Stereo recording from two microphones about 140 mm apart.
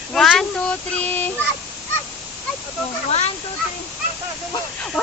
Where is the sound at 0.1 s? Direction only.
5° left (ahead or behind).